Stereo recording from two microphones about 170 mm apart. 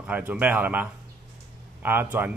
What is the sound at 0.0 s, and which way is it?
Speech, 10° right (ahead or behind).